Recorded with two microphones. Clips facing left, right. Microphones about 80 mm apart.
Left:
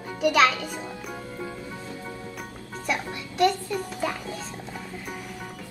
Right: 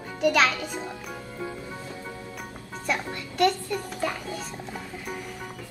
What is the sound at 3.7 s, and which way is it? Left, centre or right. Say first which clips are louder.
Speech: left 1 dB; centre.